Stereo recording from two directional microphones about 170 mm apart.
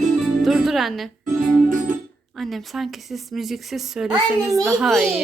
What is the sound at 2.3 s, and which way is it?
Speech, centre (ahead or behind).